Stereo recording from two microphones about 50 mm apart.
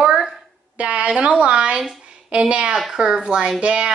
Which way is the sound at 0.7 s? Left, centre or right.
Right.